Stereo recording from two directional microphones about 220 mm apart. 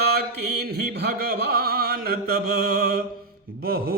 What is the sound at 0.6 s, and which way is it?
Music, 45° right (ahead or behind).